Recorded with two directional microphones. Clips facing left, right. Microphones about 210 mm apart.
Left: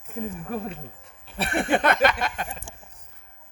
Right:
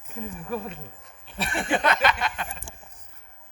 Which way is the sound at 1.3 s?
60° left (ahead or behind).